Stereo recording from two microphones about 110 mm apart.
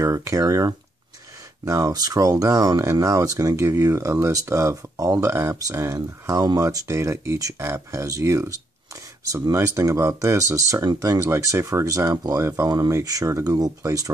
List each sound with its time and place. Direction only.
0.0 s speech: 30° right (ahead or behind)